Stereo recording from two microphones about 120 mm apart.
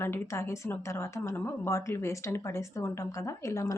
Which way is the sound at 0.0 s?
20° left (ahead or behind).